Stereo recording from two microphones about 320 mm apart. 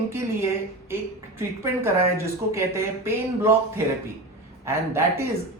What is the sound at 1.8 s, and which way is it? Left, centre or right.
Speech, centre.